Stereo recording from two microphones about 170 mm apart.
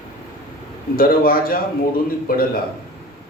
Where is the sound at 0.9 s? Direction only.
60° left (ahead or behind).